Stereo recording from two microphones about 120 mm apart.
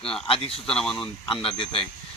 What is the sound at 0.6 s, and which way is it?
Speech, 5° left (ahead or behind).